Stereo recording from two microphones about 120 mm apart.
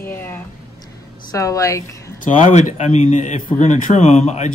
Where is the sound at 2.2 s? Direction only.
90° left.